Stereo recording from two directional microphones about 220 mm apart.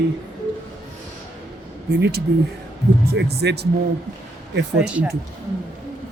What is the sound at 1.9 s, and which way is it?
Speech, 50° right (ahead or behind).